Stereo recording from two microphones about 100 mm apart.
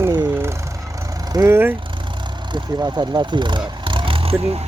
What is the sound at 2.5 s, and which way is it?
Speech, 45° right (ahead or behind).